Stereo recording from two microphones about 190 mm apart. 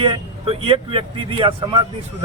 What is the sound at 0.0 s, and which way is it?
Speech, 30° right (ahead or behind).